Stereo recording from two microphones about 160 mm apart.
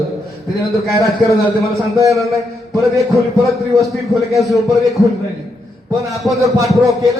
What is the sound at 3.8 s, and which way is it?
A man's voice, centre (ahead or behind).